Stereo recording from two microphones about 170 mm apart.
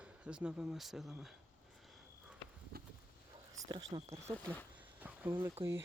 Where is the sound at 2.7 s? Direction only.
65° right (ahead or behind).